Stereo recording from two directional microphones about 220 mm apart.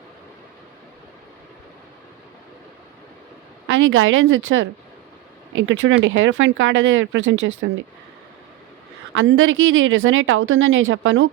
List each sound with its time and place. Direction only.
3.7 s speech: 65° right (ahead or behind)
9.1 s speech: 65° right (ahead or behind)